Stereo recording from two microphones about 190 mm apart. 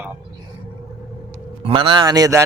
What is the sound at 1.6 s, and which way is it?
Speech, 30° right (ahead or behind).